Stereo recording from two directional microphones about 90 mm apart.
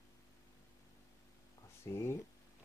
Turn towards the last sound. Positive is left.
turn(degrees=30)  # may be behind; listen again after turning